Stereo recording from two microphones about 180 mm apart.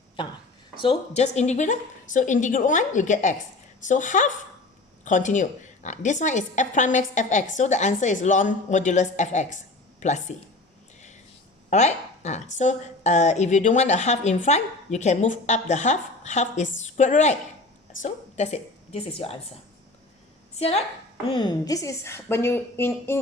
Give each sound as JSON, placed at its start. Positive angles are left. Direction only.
{"t": 0.2, "sound": "a woman's voice", "side_deg": 25}
{"t": 11.7, "sound": "a woman's voice", "side_deg": 40}
{"t": 20.6, "sound": "a woman's voice", "side_deg": 35}